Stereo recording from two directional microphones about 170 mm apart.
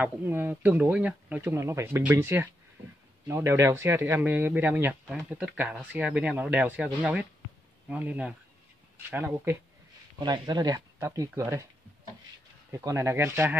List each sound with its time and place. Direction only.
0.0 s speech: 10° right (ahead or behind)
10.1 s speech: 25° right (ahead or behind)
12.7 s speech: 15° right (ahead or behind)